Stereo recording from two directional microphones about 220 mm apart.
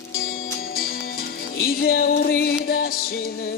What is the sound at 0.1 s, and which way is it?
Music, 40° left (ahead or behind).